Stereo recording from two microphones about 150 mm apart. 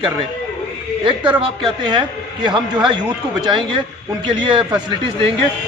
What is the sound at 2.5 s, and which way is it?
Speech, 30° right (ahead or behind).